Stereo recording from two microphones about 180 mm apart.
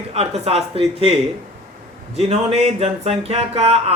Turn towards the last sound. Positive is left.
turn(degrees=-35)  # may be behind; listen again after turning